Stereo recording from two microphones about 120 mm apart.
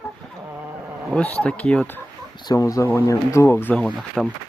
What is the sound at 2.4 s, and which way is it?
Speech, 30° left (ahead or behind).